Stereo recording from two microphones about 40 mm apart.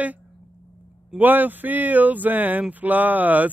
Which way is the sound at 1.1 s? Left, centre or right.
Right.